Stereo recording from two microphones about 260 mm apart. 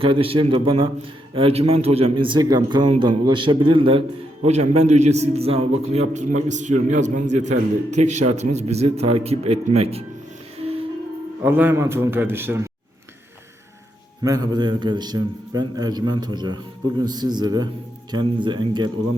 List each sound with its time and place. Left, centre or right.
0.0 s speech: right
10.6 s music: right
11.4 s a man's voice: centre
14.3 s a man's voice: centre